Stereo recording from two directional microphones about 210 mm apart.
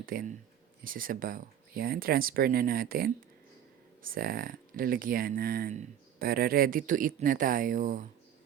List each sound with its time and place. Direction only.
0.0 s speech: 40° right (ahead or behind)